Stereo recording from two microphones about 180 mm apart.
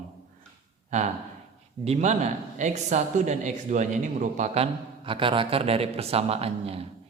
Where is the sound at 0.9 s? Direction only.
40° right (ahead or behind).